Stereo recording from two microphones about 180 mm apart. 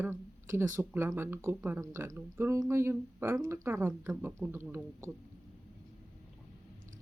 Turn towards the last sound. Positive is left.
turn(degrees=-15)  # may be behind; listen again after turning